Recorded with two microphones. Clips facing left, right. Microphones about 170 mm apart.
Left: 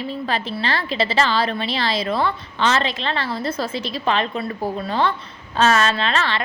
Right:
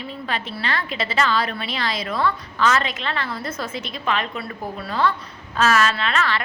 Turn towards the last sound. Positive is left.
turn(degrees=30)  # may be behind; listen again after turning